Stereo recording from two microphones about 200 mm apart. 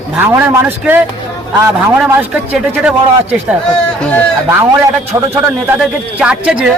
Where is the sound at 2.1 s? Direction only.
10° right (ahead or behind).